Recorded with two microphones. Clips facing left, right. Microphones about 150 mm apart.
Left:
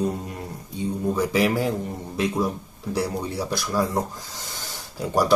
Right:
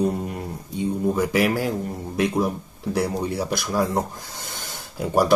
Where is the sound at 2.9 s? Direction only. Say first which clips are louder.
Right 2 dB; 15° right (ahead or behind).